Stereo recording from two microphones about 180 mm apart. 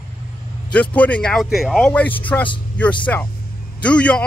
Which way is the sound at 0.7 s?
5° left (ahead or behind).